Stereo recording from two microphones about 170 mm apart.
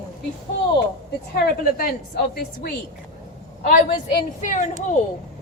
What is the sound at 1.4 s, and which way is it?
A woman's voice, 65° left (ahead or behind).